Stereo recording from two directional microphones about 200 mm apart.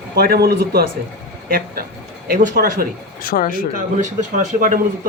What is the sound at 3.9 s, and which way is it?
Speech, 40° right (ahead or behind).